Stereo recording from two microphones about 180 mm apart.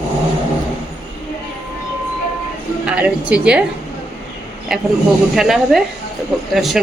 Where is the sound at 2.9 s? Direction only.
5° right (ahead or behind).